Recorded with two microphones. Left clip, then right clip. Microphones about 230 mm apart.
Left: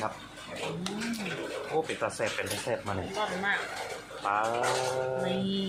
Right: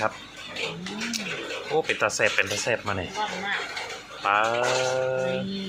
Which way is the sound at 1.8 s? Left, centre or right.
Centre.